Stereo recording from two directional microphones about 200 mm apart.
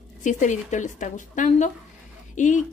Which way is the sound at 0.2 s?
40° left (ahead or behind).